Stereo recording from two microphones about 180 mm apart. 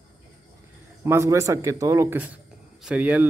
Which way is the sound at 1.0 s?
15° right (ahead or behind).